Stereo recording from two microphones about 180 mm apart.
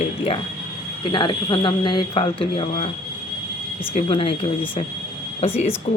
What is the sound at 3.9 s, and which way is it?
Speech, 30° left (ahead or behind).